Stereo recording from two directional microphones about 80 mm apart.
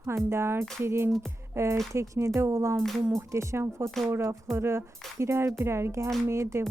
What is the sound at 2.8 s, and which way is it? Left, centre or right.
Speech, centre.